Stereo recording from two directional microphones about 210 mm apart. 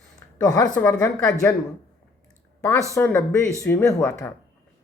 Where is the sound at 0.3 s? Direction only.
15° left (ahead or behind).